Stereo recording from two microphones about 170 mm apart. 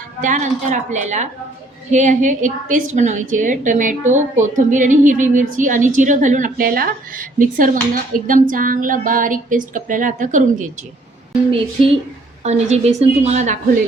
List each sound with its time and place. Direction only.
0.2 s a woman's voice: 45° right (ahead or behind)
11.8 s a woman's voice: 35° right (ahead or behind)